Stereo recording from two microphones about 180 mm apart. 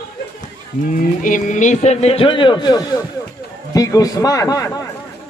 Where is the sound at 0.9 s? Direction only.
45° left (ahead or behind); by 4.6 s 20° left (ahead or behind).